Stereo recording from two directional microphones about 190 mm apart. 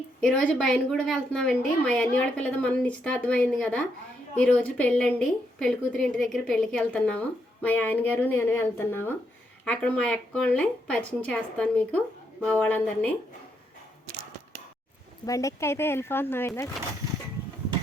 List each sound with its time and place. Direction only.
0.2 s a woman's voice: 5° left (ahead or behind)
15.3 s a woman's voice: 15° left (ahead or behind)